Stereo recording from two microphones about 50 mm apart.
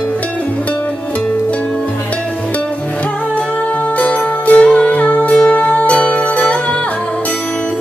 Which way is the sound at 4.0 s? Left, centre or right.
Left.